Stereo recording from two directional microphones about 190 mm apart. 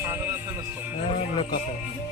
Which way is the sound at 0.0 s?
10° right (ahead or behind).